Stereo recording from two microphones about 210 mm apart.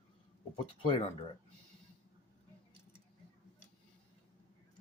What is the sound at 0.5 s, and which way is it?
Speech, 25° left (ahead or behind).